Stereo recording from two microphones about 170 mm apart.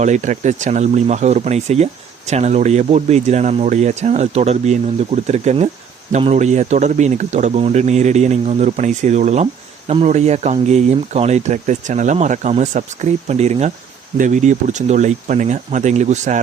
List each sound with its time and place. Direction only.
0.0 s speech: 45° right (ahead or behind)